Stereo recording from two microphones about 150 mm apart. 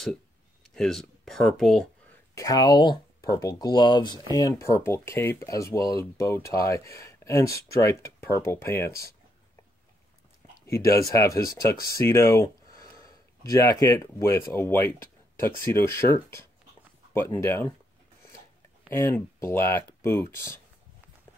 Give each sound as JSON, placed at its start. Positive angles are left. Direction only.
{"t": 0.7, "sound": "speech", "side_deg": 5}
{"t": 2.3, "sound": "speech", "side_deg": 25}
{"t": 10.7, "sound": "speech", "side_deg": 20}
{"t": 12.9, "sound": "a sound", "side_deg": 25}
{"t": 14.5, "sound": "speech", "side_deg": 15}
{"t": 18.9, "sound": "speech", "side_deg": 15}